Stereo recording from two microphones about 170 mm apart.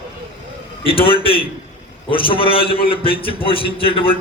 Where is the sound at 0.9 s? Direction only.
35° left (ahead or behind).